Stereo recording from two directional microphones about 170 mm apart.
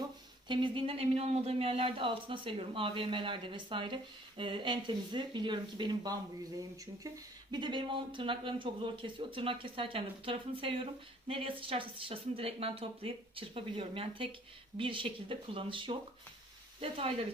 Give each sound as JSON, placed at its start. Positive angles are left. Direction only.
{"t": 0.4, "sound": "speech", "side_deg": -30}
{"t": 7.5, "sound": "speech", "side_deg": -25}